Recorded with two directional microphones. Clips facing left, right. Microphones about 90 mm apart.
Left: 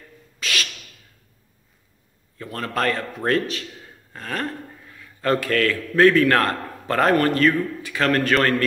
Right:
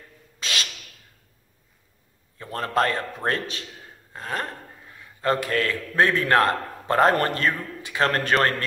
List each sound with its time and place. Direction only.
0.4 s owl: 25° right (ahead or behind)
2.3 s a man's voice: 30° right (ahead or behind)